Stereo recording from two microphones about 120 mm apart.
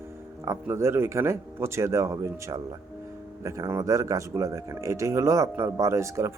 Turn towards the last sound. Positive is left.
turn(degrees=-25)  # may be behind; listen again after turning